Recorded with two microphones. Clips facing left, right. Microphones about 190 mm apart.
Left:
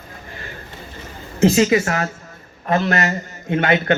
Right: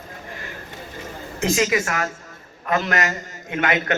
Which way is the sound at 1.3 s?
30° left (ahead or behind).